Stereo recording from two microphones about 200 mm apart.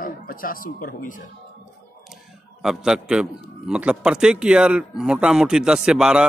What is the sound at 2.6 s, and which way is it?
A man's voice, 5° right (ahead or behind).